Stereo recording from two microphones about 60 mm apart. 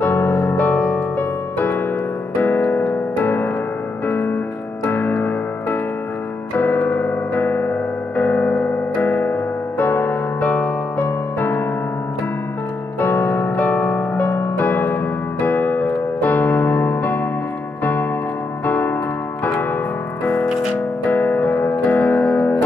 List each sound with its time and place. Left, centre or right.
0.0 s music: left
0.3 s music: left
0.6 s music: left
2.3 s piano: left
6.6 s keyboard: left
11.3 s music: left
13.0 s music: left
14.7 s keyboard: left
18.7 s keyboard: left
21.0 s music: left